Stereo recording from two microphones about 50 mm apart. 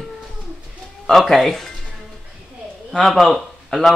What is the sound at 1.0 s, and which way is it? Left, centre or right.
Speech, centre.